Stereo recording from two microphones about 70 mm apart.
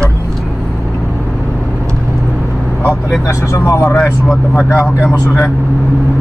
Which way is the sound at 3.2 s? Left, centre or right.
Left.